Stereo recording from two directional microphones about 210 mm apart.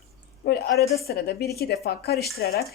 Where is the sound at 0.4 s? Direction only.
50° left (ahead or behind).